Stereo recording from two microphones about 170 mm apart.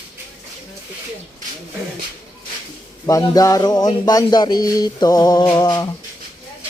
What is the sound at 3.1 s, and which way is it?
Speech, 20° left (ahead or behind).